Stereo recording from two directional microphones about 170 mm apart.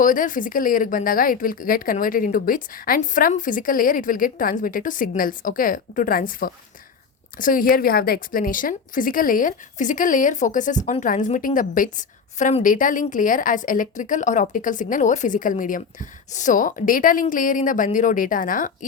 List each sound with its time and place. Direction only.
0.0 s a woman's voice: 50° left (ahead or behind)